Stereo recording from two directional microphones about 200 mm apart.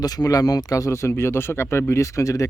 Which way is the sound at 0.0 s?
20° left (ahead or behind).